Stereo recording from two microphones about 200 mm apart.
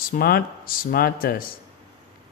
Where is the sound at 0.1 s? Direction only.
50° left (ahead or behind).